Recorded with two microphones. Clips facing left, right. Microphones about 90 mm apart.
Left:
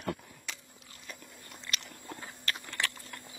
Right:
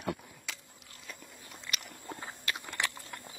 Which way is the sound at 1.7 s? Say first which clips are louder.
Even; 10° right (ahead or behind).